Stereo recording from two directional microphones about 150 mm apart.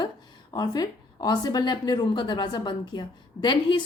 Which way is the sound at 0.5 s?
25° left (ahead or behind).